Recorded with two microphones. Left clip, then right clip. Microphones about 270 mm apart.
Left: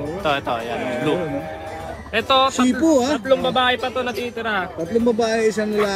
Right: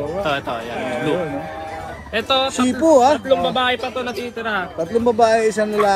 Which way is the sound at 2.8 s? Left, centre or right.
Centre.